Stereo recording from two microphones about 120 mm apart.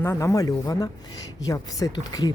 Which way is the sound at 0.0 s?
25° left (ahead or behind).